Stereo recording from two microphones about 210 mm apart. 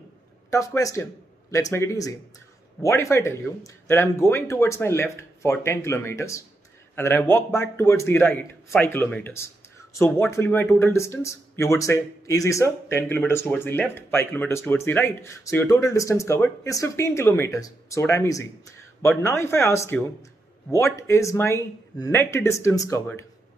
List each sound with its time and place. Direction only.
0.5 s speech: 15° left (ahead or behind)